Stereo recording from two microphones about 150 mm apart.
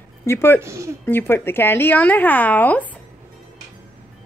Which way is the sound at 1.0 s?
15° left (ahead or behind).